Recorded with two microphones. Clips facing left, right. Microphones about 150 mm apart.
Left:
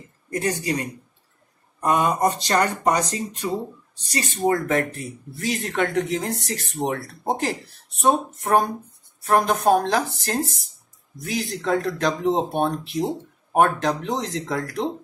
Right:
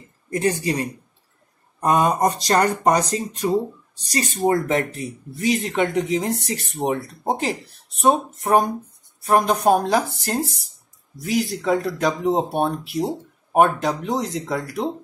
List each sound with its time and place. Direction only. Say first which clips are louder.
0.4 s speech: right 3 dB; 30° right (ahead or behind)
4.5 s speech: right 1 dB; 20° right (ahead or behind)